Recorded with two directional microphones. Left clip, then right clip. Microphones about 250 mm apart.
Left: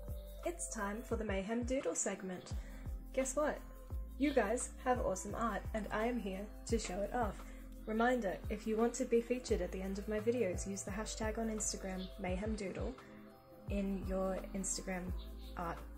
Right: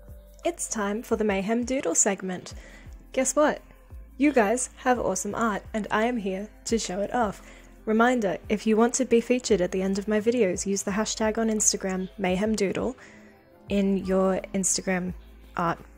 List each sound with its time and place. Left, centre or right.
0.4 s speech: right